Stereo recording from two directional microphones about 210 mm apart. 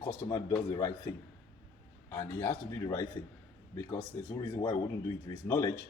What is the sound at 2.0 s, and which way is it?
A man's voice, 15° left (ahead or behind).